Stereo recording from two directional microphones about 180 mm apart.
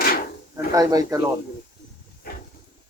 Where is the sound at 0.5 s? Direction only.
20° right (ahead or behind).